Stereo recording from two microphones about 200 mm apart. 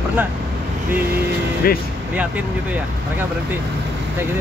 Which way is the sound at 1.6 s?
50° left (ahead or behind).